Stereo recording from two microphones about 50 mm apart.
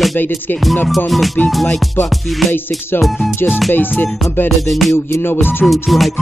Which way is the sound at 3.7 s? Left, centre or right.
Left.